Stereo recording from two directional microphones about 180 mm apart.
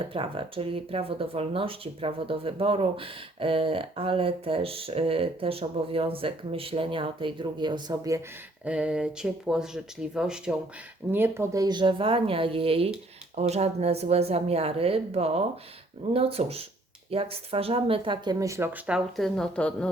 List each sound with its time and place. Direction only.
0.0 s speech: 30° right (ahead or behind)
8.6 s speech: 5° right (ahead or behind)